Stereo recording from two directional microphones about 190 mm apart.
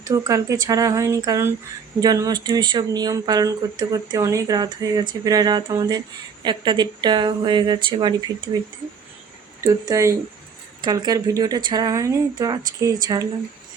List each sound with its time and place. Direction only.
0.0 s speech: 20° right (ahead or behind)
9.6 s speech: 20° right (ahead or behind)